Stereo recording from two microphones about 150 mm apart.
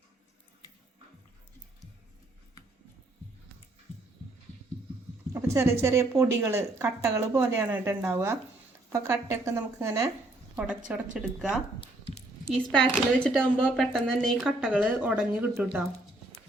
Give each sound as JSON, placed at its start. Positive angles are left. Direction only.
{"t": 5.3, "sound": "speech", "side_deg": -20}
{"t": 10.5, "sound": "speech", "side_deg": -5}
{"t": 11.8, "sound": "a sound", "side_deg": 40}
{"t": 12.5, "sound": "speech", "side_deg": 5}